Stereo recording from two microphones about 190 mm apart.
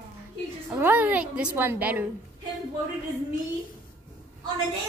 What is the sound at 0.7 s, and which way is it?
Speech, 10° right (ahead or behind).